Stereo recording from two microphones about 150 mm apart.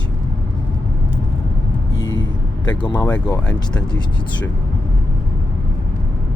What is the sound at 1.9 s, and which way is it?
Music, 25° left (ahead or behind).